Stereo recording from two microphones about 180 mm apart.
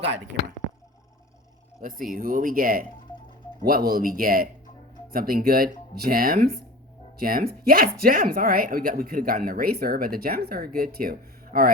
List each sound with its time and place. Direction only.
0.3 s speech: 60° right (ahead or behind)
1.8 s speech: 50° right (ahead or behind)